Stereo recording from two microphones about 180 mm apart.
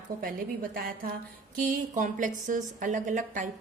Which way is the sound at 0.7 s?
55° right (ahead or behind).